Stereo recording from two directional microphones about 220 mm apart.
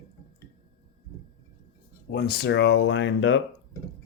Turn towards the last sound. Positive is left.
turn(degrees=55)  # may be behind; listen again after turning